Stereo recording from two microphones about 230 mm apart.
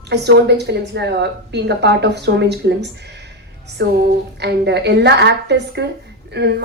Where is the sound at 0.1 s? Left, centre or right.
Right.